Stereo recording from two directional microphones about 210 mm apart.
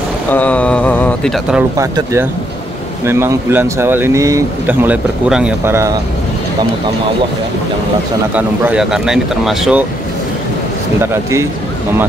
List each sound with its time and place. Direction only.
0.3 s speech: 5° left (ahead or behind)
1.8 s speech: 15° right (ahead or behind)
8.4 s speech: 5° right (ahead or behind)
11.0 s speech: 15° right (ahead or behind)